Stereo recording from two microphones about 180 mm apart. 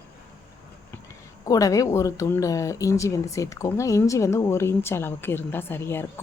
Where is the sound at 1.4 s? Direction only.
20° left (ahead or behind).